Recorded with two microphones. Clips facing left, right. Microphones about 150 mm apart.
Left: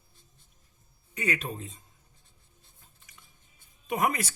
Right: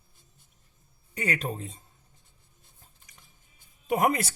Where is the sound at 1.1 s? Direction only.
30° right (ahead or behind).